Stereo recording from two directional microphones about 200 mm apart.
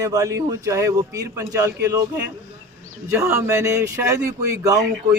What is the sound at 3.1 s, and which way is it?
Speech, 10° right (ahead or behind).